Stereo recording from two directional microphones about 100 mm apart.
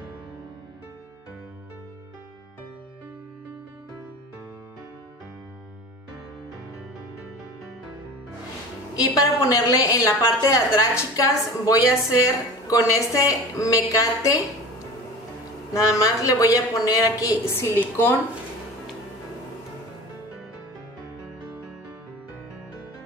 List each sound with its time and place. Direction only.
8.9 s speech: 35° left (ahead or behind)
15.7 s speech: 35° left (ahead or behind)